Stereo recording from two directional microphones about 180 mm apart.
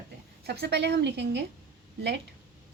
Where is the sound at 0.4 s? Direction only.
65° right (ahead or behind).